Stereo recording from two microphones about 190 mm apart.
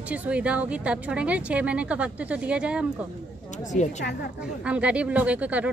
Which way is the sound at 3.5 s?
40° left (ahead or behind).